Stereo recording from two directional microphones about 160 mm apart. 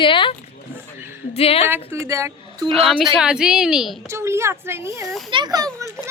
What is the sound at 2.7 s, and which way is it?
Speech, centre (ahead or behind).